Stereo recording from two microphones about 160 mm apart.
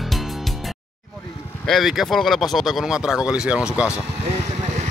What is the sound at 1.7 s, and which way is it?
Speech, centre (ahead or behind).